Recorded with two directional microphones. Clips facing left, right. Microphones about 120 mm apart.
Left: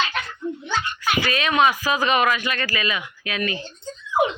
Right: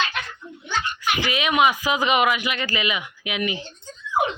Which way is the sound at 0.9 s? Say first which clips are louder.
Left 2 dB; 15° right (ahead or behind).